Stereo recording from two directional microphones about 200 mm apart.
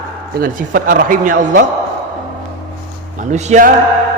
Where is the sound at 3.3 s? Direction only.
35° right (ahead or behind).